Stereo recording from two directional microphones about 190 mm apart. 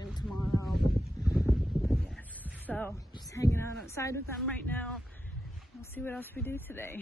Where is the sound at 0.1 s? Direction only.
Centre (ahead or behind).